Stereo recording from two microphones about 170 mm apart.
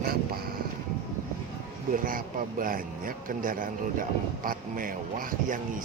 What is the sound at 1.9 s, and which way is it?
Speech, 55° right (ahead or behind).